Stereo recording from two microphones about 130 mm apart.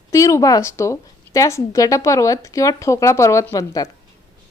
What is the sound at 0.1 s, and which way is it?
Speech, 25° left (ahead or behind).